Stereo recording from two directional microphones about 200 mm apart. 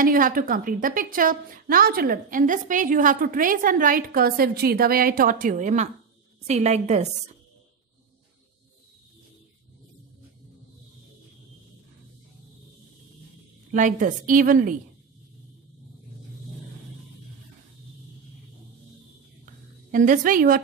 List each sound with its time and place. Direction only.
0.0 s a woman's voice: 45° right (ahead or behind)
13.7 s a woman's voice: 40° right (ahead or behind)
19.4 s a sound: 40° right (ahead or behind)